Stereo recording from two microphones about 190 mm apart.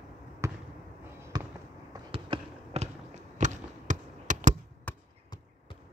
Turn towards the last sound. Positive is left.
turn(degrees=10)  # may be behind; listen again after turning